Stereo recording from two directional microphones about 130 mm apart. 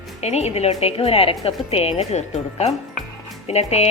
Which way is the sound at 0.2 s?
55° left (ahead or behind).